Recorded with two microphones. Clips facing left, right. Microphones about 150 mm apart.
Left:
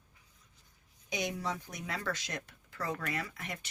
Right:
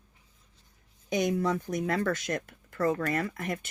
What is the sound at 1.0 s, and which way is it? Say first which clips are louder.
Speech: right 9 dB; 50° right (ahead or behind).